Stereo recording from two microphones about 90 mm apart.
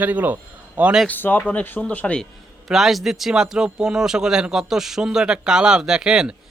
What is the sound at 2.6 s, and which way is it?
A man's voice, 5° right (ahead or behind).